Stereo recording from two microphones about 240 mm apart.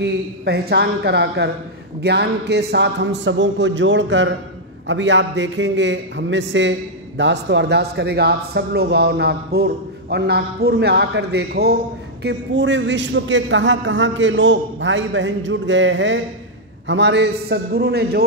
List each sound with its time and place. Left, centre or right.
0.0 s a man's voice: right